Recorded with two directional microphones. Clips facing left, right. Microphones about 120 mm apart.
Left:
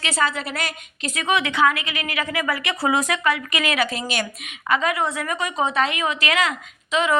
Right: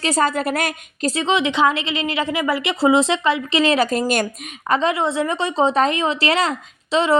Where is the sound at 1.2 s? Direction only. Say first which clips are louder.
Right 1 dB; 20° right (ahead or behind).